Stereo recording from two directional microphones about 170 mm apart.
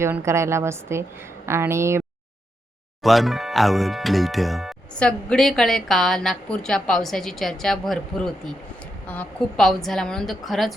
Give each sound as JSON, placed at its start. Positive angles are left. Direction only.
{"t": 0.0, "sound": "a woman's voice", "side_deg": -15}
{"t": 3.0, "sound": "speech", "side_deg": 0}